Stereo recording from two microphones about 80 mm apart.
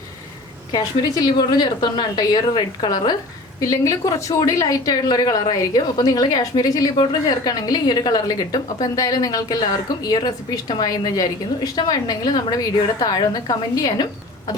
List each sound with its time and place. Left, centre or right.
0.7 s a woman's voice: left
3.6 s a woman's voice: left